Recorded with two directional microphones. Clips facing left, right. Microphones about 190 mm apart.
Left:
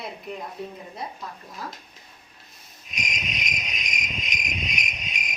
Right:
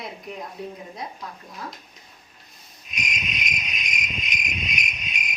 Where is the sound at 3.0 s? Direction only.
60° right (ahead or behind).